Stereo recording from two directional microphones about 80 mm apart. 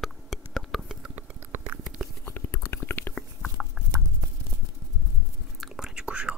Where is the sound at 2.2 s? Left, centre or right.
Left.